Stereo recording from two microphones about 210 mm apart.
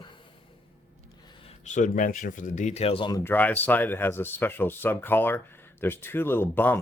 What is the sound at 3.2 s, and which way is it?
A man's voice, 10° left (ahead or behind).